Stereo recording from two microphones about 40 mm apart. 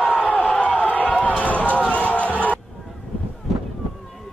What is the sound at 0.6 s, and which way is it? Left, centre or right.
Run, left.